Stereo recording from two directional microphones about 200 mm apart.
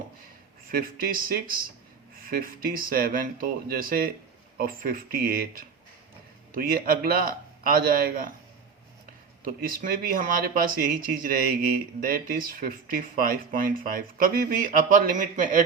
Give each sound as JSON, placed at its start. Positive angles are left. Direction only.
{"t": 0.7, "sound": "speech", "side_deg": -45}
{"t": 9.5, "sound": "speech", "side_deg": -45}